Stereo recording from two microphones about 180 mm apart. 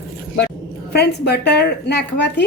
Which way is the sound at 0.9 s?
65° left (ahead or behind).